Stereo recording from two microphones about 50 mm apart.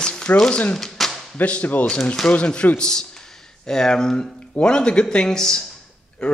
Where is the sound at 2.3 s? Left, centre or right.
Left.